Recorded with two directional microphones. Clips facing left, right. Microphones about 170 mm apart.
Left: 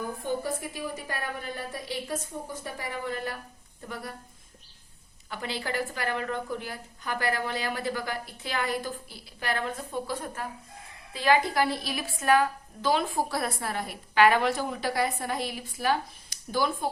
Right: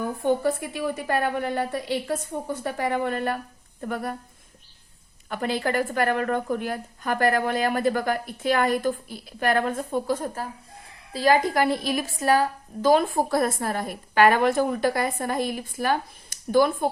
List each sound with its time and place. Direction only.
0.2 s a woman's voice: 65° right (ahead or behind)
5.3 s a woman's voice: 50° right (ahead or behind)